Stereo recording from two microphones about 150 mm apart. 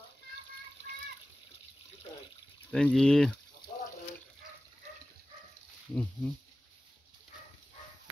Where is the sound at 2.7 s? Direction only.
5° left (ahead or behind).